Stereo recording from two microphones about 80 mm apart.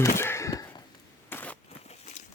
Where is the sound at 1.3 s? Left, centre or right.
Left.